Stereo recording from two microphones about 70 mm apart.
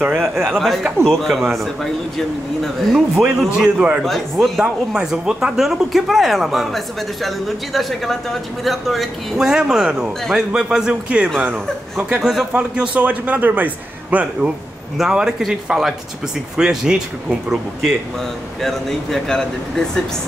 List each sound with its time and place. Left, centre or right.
0.0 s a man's voice: right
0.4 s a man's voice: centre
3.6 s a man's voice: centre
4.0 s a man's voice: centre
12.2 s a man's voice: centre
12.5 s speech: centre
15.0 s a man's voice: centre
18.6 s a man's voice: centre